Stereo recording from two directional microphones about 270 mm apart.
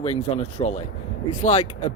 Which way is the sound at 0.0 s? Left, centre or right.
Left.